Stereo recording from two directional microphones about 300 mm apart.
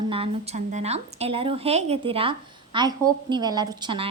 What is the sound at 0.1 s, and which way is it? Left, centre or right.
A woman's voice, centre.